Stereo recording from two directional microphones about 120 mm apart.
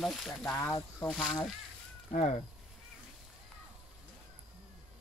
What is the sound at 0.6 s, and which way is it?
Speech, 25° left (ahead or behind).